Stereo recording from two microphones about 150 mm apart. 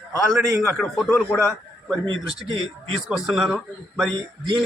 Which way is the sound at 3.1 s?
Centre (ahead or behind).